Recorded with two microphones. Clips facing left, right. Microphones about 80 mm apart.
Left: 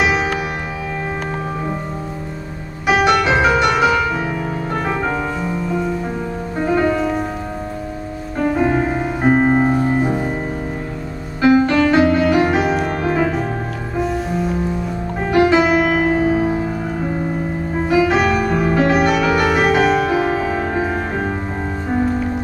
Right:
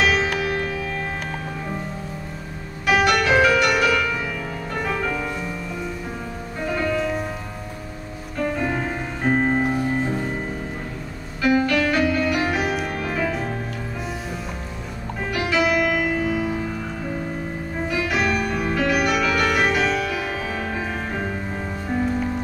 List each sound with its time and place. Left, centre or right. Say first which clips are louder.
2.9 s music: left 3 dB; left
8.4 s music: left 7 dB; left
11.4 s music: left 6 dB; left
15.3 s music: left 8 dB; left
18.0 s music: left 7 dB; left
18.5 s music: left 7 dB; left
18.8 s music: left 4 dB; left
19.7 s music: left 7 dB; left